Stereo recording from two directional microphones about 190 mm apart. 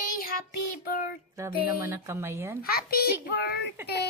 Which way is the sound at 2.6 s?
55° left (ahead or behind).